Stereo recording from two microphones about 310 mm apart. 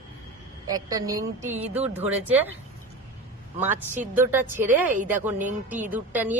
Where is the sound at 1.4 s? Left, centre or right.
Right.